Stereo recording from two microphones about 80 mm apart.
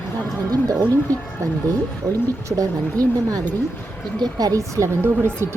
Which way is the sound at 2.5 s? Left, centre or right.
Right.